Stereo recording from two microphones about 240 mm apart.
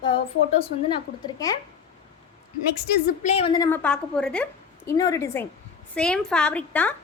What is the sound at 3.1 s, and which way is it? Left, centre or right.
A woman's voice, left.